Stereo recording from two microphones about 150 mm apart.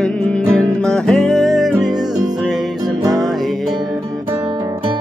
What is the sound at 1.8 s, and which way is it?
Music, 25° right (ahead or behind).